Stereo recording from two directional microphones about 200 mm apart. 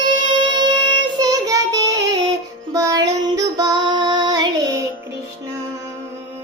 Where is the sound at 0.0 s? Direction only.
20° right (ahead or behind).